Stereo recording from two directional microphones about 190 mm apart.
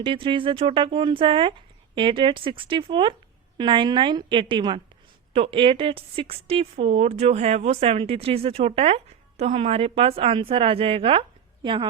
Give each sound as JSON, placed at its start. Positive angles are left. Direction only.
{"t": 0.0, "sound": "a woman's voice", "side_deg": -25}